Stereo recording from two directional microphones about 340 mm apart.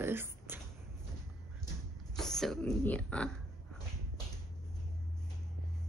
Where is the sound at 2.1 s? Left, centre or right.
Centre.